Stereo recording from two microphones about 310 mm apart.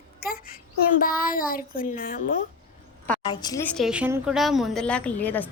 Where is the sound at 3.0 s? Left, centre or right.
Centre.